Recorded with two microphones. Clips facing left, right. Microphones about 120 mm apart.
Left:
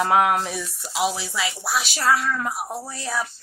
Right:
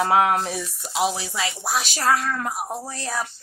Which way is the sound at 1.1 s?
45° right (ahead or behind).